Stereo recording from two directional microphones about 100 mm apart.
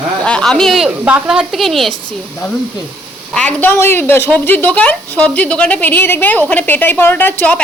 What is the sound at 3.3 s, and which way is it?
A woman's voice, 15° left (ahead or behind).